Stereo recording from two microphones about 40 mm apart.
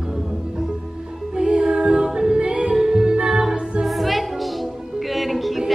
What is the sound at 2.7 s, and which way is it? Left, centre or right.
Music, centre.